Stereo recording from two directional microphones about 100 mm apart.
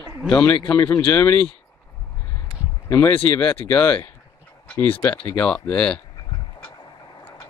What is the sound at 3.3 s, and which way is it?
Speech, 15° left (ahead or behind).